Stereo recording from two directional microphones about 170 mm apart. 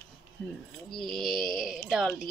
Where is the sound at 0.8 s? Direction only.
Centre (ahead or behind).